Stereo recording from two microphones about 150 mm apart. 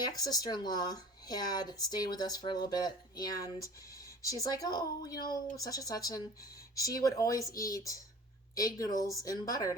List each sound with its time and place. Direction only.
0.1 s speech: 25° left (ahead or behind)